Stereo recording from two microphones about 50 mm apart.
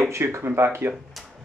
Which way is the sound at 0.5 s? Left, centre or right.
Right.